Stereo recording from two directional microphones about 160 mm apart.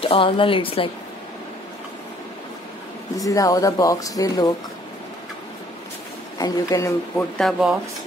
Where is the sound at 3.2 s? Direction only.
20° left (ahead or behind).